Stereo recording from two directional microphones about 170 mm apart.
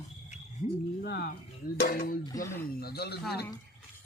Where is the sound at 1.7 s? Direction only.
60° left (ahead or behind).